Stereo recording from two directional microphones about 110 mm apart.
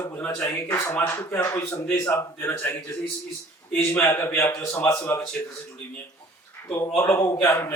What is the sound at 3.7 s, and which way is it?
Speech, 20° left (ahead or behind).